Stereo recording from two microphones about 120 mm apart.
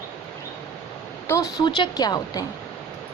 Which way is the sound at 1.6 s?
40° left (ahead or behind).